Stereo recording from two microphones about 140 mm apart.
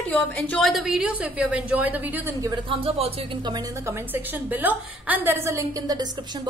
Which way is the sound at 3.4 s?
30° right (ahead or behind).